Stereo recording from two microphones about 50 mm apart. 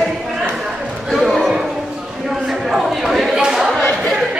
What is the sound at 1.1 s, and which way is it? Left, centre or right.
Chatter, centre.